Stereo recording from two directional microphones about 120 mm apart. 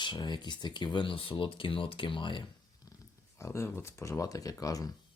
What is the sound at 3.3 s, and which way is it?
Speech, 25° left (ahead or behind).